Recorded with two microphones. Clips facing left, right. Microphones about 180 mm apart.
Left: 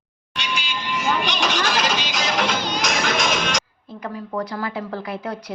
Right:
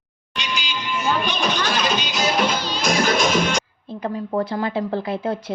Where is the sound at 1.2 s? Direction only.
85° left.